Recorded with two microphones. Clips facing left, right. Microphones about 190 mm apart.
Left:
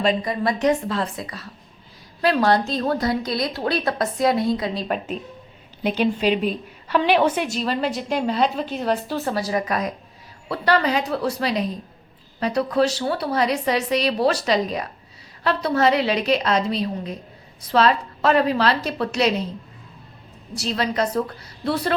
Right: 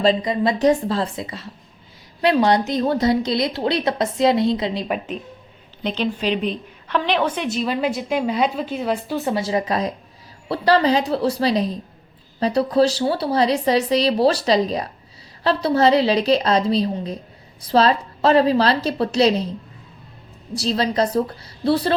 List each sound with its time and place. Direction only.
0.2 s a woman's voice: 20° right (ahead or behind)
0.6 s a woman's voice: 35° right (ahead or behind)
5.8 s a woman's voice: 10° left (ahead or behind)
7.5 s a woman's voice: 10° right (ahead or behind); by 19.5 s 35° right (ahead or behind)
20.6 s a woman's voice: 35° right (ahead or behind)